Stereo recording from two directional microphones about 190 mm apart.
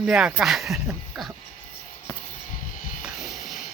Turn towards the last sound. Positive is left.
turn(degrees=-5)  # may be behind; listen again after turning